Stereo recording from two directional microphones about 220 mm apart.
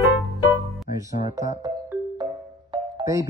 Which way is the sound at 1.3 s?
15° right (ahead or behind).